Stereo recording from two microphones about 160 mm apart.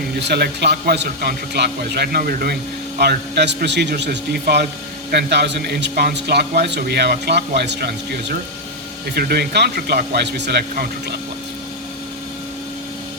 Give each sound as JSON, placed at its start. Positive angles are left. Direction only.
{"t": 0.3, "sound": "a man's voice", "side_deg": -90}
{"t": 3.0, "sound": "a man's voice", "side_deg": -90}